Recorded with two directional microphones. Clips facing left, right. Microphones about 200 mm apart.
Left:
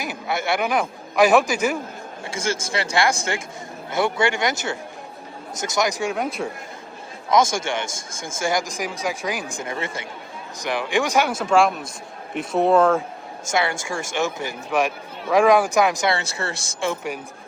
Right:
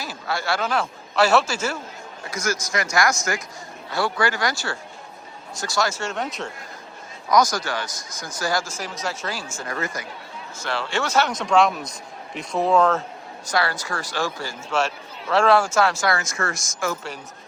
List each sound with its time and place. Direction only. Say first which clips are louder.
0.0 s a man's voice: left 2 dB; 20° left (ahead or behind)
2.3 s speech: even; 30° left (ahead or behind); by 6.5 s 10° left (ahead or behind)
7.3 s speech: left 1 dB; 25° left (ahead or behind)
10.6 s speech: left 4 dB; 15° left (ahead or behind)
13.5 s speech: left 1 dB; 20° left (ahead or behind)